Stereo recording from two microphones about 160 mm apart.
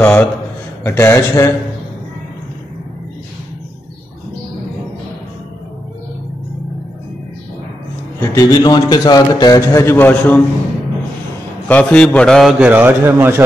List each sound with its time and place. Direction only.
0.0 s a man's voice: 10° left (ahead or behind)
8.2 s a man's voice: 20° left (ahead or behind)
11.6 s a man's voice: 10° left (ahead or behind); by 13.4 s 15° right (ahead or behind)